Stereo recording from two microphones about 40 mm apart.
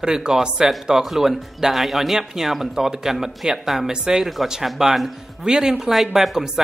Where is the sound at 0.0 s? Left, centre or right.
Centre.